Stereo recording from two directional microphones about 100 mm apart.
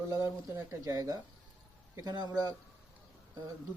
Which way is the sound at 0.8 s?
35° right (ahead or behind).